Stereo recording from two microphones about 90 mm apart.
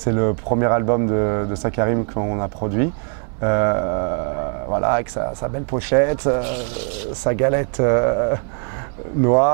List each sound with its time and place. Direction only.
0.0 s speech: 20° right (ahead or behind)